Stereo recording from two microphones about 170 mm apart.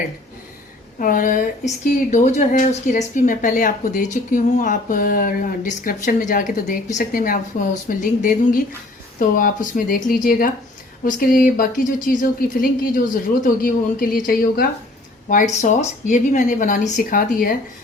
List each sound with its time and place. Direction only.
0.9 s a woman's voice: 50° left (ahead or behind)